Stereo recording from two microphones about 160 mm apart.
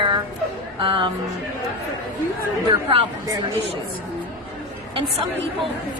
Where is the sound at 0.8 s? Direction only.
30° right (ahead or behind).